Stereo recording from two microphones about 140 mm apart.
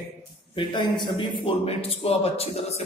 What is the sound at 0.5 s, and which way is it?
Speech, 35° left (ahead or behind).